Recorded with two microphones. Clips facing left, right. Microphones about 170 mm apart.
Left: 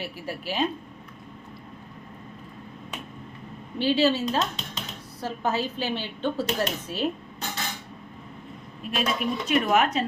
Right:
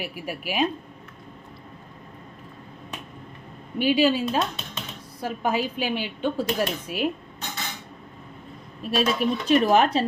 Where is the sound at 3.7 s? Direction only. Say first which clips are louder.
Right 2 dB; 15° right (ahead or behind).